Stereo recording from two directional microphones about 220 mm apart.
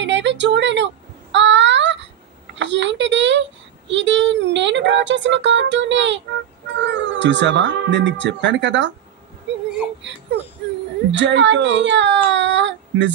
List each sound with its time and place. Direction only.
0.0 s a sound: 55° right (ahead or behind)
2.5 s a child's voice: 55° right (ahead or behind)
11.1 s a child's voice: 55° right (ahead or behind)